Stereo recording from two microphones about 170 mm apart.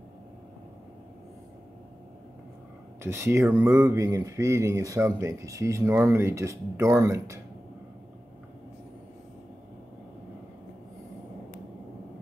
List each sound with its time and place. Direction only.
3.0 s speech: 15° right (ahead or behind)